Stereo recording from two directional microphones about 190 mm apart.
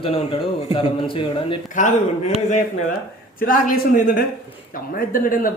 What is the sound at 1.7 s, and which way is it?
Speech, 40° left (ahead or behind).